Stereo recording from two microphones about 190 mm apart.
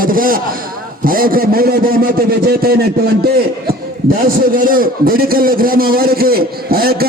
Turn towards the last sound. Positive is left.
turn(degrees=-50)  # may be behind; listen again after turning